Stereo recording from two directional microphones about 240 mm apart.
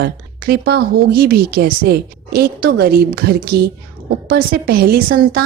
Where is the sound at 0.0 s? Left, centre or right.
Right.